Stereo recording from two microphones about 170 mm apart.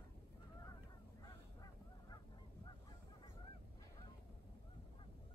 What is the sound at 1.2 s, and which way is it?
Honk, 20° left (ahead or behind).